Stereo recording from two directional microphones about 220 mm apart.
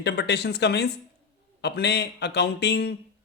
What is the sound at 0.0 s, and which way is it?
Speech, 50° left (ahead or behind).